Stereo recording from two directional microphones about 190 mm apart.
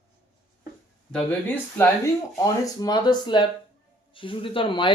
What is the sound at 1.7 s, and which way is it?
Speech, 15° left (ahead or behind).